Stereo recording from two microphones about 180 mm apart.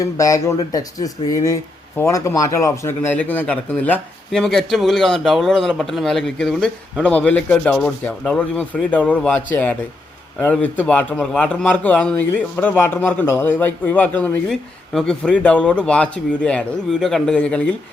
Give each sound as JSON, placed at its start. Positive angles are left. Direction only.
{"t": 0.0, "sound": "speech", "side_deg": 20}